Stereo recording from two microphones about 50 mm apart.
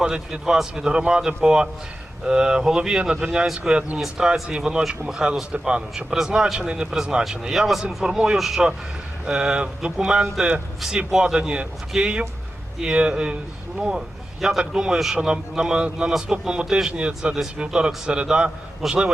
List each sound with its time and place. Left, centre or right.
0.0 s a man's voice: centre
4.8 s a man's voice: centre
9.2 s a man's voice: centre
11.3 s a man's voice: right